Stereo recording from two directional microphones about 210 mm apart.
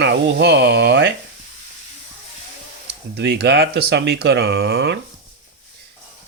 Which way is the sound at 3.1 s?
55° right (ahead or behind).